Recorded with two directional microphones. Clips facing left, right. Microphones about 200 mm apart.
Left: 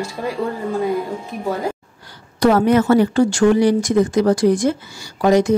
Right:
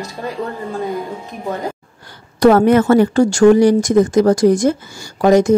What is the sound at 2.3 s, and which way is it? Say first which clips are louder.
Speech: right 4 dB; 50° right (ahead or behind).